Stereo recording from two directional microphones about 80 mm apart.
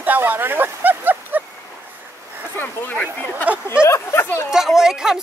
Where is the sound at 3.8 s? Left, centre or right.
Left.